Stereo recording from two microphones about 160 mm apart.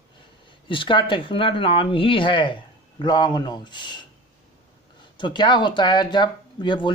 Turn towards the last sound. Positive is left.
turn(degrees=30)  # may be behind; listen again after turning